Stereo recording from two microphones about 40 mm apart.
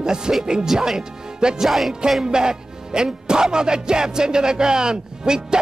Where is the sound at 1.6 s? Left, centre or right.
Centre.